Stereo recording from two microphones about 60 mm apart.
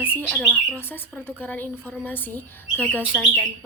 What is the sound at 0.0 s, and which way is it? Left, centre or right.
A woman's voice, left.